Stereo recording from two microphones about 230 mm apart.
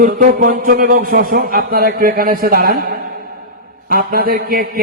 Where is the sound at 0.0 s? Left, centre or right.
Right.